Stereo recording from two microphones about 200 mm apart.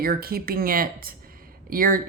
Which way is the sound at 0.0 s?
50° right (ahead or behind).